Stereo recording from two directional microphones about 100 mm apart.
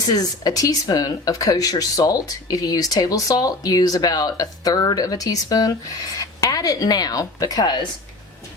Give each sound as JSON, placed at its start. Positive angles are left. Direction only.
{"t": 0.1, "sound": "speech", "side_deg": 40}